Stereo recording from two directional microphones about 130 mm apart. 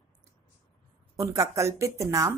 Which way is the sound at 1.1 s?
25° right (ahead or behind).